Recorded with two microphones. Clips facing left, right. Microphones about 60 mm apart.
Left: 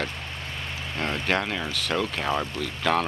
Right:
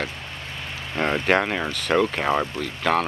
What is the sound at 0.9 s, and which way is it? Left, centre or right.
Speech, right.